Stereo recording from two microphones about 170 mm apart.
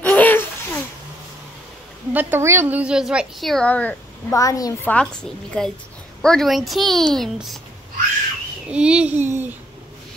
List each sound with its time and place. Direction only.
0.0 s laughter: 10° left (ahead or behind)
2.1 s a woman's voice: 10° right (ahead or behind); by 3.9 s 10° left (ahead or behind)
4.3 s a woman's voice: 20° left (ahead or behind)
4.9 s a woman's voice: 5° left (ahead or behind)
8.6 s a child's voice: 5° right (ahead or behind)